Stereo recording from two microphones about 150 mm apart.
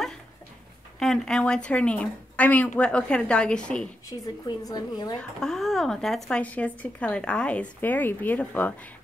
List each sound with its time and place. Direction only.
0.9 s speech: 5° left (ahead or behind)
4.1 s a woman's voice: 25° left (ahead or behind)
5.4 s speech: centre (ahead or behind)